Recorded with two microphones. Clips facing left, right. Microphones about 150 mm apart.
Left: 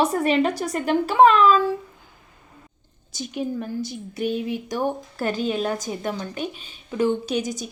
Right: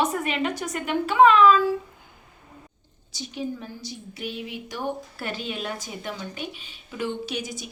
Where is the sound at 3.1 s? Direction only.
50° left (ahead or behind).